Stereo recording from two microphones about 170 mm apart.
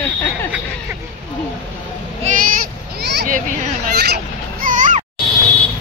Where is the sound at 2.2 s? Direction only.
50° right (ahead or behind).